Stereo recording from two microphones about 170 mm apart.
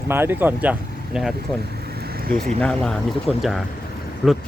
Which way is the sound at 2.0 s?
60° right (ahead or behind).